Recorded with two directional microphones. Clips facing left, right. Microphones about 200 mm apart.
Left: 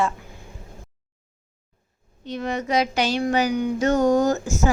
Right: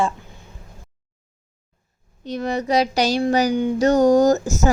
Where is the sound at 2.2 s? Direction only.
40° right (ahead or behind).